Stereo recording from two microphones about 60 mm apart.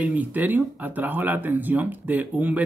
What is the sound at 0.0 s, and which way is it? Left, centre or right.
Speech, right.